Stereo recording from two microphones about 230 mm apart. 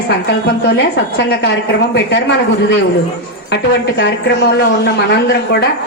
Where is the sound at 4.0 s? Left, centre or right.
Left.